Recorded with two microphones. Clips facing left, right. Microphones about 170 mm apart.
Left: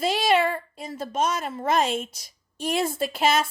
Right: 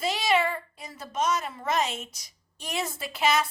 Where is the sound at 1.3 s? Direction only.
55° left (ahead or behind).